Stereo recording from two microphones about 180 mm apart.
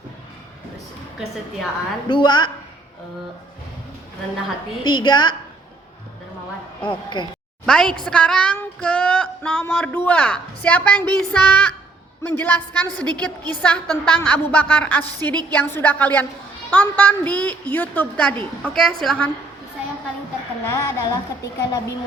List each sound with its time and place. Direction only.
2.0 s a woman's voice: 25° left (ahead or behind)
4.8 s a woman's voice: 25° left (ahead or behind)
6.8 s a woman's voice: 25° left (ahead or behind)
7.6 s a woman's voice: 5° left (ahead or behind)
8.0 s child singing: 5° left (ahead or behind)
13.6 s a woman's voice: 5° left (ahead or behind)
14.3 s child singing: 10° left (ahead or behind)
20.7 s a woman's voice: 20° left (ahead or behind)